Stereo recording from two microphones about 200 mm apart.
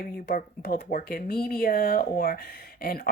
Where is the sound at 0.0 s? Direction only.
45° left (ahead or behind).